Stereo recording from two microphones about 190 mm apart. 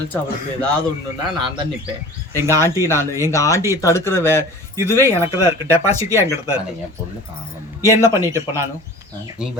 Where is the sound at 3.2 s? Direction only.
15° left (ahead or behind).